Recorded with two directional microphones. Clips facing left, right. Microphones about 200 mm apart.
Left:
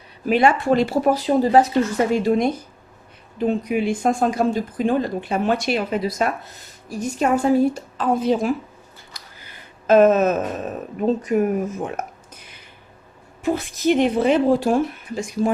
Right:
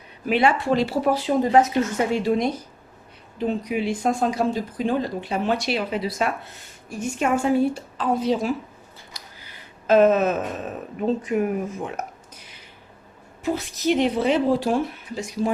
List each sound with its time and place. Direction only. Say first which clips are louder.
0.3 s a woman's voice: left 3 dB; 45° left (ahead or behind)
3.6 s a woman's voice: left 3 dB; 50° left (ahead or behind)
9.1 s a sound: left 2 dB; 50° left (ahead or behind)
11.0 s a woman's voice: left 3 dB; 40° left (ahead or behind)